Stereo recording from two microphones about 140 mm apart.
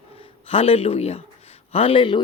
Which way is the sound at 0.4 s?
45° left (ahead or behind).